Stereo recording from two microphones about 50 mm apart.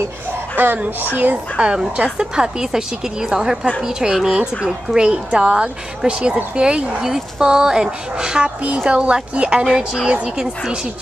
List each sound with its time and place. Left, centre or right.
1.1 s speech: right
1.6 s speech: centre